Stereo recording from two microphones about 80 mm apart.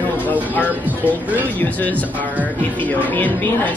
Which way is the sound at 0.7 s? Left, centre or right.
Right.